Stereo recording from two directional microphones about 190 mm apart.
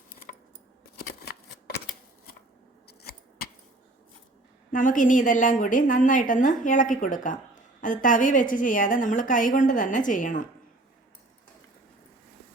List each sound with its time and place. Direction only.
0.9 s a sound: 60° left (ahead or behind)
3.0 s scissors: 55° left (ahead or behind)
4.7 s a woman's voice: 45° left (ahead or behind)